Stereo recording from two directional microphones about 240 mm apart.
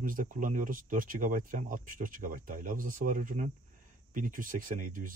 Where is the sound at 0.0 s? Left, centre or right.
Right.